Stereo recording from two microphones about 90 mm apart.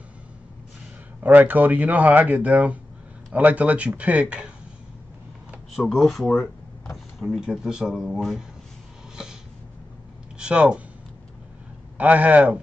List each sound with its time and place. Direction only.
1.2 s speech: 20° right (ahead or behind)
5.8 s speech: centre (ahead or behind)
9.1 s a sound: 5° right (ahead or behind)
10.4 s speech: 10° right (ahead or behind)
12.0 s speech: 15° right (ahead or behind)